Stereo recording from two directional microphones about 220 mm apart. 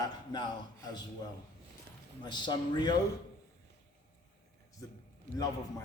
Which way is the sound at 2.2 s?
20° left (ahead or behind).